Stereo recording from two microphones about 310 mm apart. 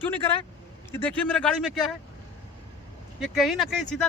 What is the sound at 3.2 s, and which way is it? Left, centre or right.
Speech, centre.